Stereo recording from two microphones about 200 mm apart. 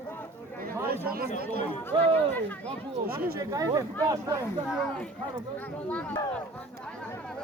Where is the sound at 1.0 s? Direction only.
50° right (ahead or behind).